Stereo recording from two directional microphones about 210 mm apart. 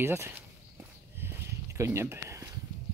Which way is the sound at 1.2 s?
15° right (ahead or behind).